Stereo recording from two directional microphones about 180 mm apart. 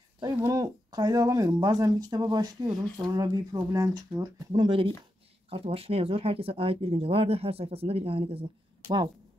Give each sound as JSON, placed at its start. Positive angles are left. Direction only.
{"t": 0.4, "sound": "speech", "side_deg": -20}